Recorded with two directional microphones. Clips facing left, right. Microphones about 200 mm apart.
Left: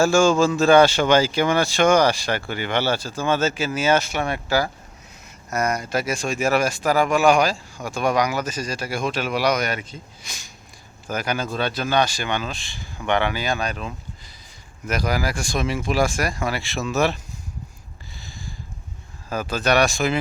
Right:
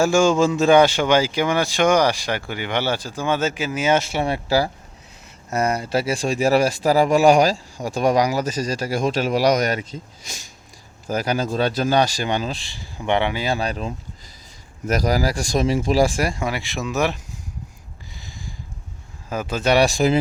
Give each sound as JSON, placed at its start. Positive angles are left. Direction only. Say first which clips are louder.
{"t": 0.0, "sound": "speech", "louder": "even", "side_deg": -20}
{"t": 18.2, "sound": "a sound", "louder": "even", "side_deg": -20}
{"t": 19.3, "sound": "speech", "louder": "right 2 dB", "side_deg": -20}